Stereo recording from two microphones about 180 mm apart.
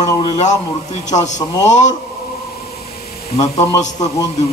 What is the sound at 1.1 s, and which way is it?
Speech, 40° left (ahead or behind).